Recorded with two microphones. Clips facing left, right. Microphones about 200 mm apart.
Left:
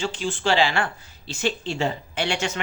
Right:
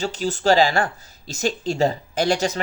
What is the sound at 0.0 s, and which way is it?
Speech, 40° right (ahead or behind).